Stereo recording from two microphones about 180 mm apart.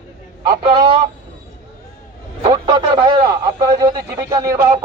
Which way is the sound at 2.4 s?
25° right (ahead or behind).